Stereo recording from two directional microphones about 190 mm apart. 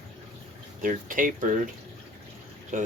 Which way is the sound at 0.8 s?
45° right (ahead or behind).